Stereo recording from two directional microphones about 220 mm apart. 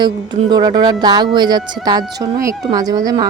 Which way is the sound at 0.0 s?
20° right (ahead or behind).